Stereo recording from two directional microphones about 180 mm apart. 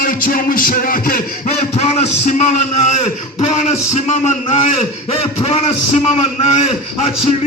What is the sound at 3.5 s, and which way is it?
Speech, 40° left (ahead or behind).